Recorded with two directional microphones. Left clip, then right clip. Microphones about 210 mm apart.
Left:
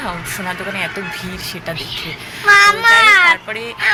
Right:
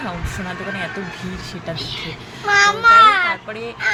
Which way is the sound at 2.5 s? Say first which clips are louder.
Left 3 dB; 15° left (ahead or behind).